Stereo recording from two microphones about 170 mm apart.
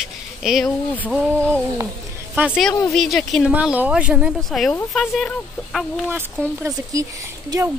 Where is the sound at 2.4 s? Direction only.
5° right (ahead or behind).